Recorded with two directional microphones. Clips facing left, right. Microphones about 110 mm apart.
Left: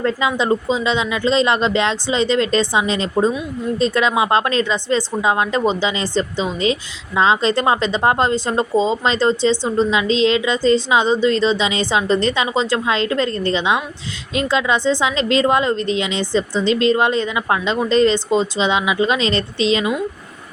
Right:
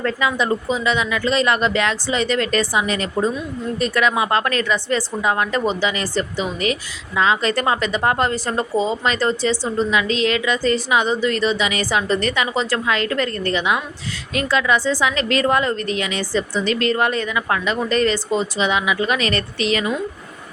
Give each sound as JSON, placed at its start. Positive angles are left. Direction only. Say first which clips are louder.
{"t": 0.0, "sound": "a woman's voice", "louder": "left 2 dB", "side_deg": 25}